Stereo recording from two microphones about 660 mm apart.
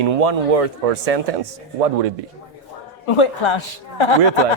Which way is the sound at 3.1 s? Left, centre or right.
Left.